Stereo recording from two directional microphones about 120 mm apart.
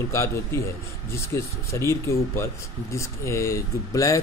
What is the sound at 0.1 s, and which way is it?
Speech, 25° left (ahead or behind).